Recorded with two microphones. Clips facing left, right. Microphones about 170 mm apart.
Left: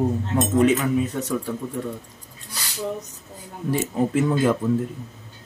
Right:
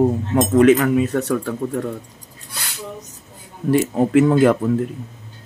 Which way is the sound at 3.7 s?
75° right (ahead or behind).